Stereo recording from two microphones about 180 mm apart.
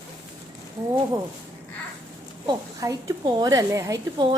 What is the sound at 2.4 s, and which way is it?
A woman's voice, 20° right (ahead or behind).